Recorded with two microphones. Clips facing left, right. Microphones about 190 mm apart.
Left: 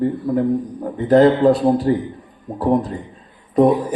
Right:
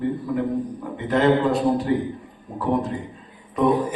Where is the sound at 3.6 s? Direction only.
35° left (ahead or behind).